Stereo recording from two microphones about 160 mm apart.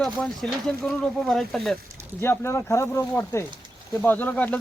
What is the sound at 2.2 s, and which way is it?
Speech, 15° left (ahead or behind).